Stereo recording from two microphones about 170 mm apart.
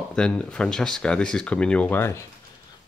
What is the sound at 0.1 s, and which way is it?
Speech, 5° left (ahead or behind).